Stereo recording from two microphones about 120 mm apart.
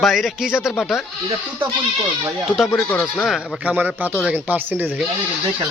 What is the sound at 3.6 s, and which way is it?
Speech, 15° right (ahead or behind).